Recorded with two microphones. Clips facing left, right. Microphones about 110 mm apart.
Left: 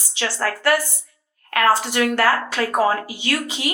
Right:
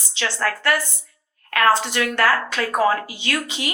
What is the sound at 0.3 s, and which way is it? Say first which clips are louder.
Speech: left 2 dB; 30° left (ahead or behind).